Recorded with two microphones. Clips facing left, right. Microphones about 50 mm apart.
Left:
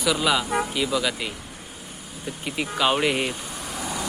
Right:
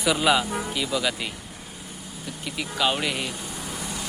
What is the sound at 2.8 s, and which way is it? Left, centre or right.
Speech, centre.